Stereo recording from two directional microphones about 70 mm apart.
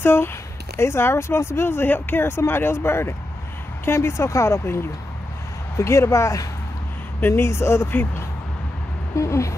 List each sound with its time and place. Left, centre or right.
0.0 s speech: left
9.1 s speech: left